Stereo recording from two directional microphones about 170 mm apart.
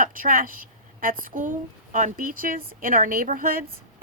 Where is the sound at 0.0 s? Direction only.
55° right (ahead or behind).